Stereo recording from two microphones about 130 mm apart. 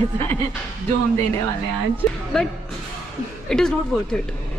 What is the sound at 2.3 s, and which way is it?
A woman's voice, 5° left (ahead or behind).